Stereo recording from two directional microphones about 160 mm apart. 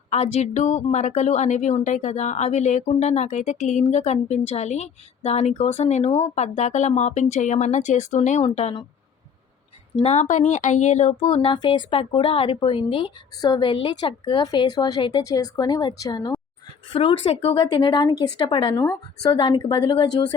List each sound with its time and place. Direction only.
0.1 s a woman's voice: 45° left (ahead or behind)
9.9 s a woman's voice: 35° left (ahead or behind)
10.2 s a woman's voice: 50° left (ahead or behind)
11.5 s a woman's voice: 30° left (ahead or behind)
18.8 s speech: 15° left (ahead or behind)
19.3 s a woman's voice: 30° left (ahead or behind)